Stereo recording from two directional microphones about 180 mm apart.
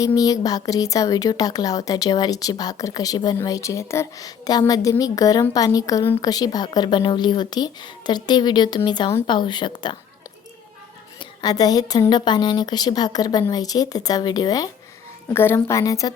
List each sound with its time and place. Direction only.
0.0 s speech: 20° left (ahead or behind)
11.2 s a woman's voice: 25° left (ahead or behind)